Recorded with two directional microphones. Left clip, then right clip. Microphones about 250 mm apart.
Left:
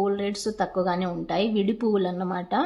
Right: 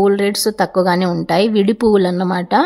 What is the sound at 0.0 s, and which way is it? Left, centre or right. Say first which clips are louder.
A woman's voice: right 12 dB; right.